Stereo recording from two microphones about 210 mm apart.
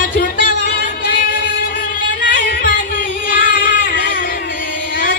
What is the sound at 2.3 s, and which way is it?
Singing, 40° left (ahead or behind).